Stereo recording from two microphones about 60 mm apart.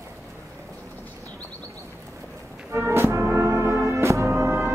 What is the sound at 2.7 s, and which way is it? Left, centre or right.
Music, right.